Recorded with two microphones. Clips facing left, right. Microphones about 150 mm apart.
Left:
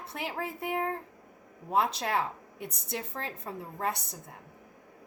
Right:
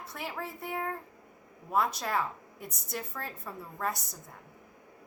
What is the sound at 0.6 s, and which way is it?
Speech, 60° left (ahead or behind).